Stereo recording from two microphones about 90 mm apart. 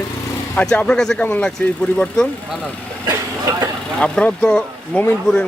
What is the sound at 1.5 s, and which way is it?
Speech, 10° left (ahead or behind).